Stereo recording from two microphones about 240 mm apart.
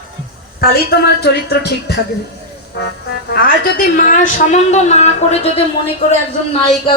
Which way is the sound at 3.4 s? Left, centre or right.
Left.